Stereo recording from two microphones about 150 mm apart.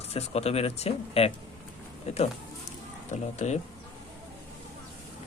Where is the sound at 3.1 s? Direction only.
50° left (ahead or behind).